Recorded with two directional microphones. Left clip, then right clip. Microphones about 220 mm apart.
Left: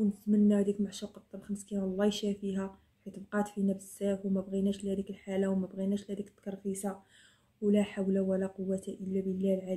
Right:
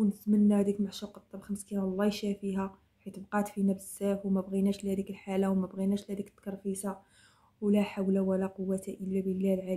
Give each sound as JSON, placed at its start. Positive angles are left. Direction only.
{"t": 0.3, "sound": "speech", "side_deg": -25}